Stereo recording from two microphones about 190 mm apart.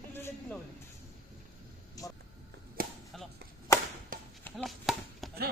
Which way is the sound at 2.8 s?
50° right (ahead or behind).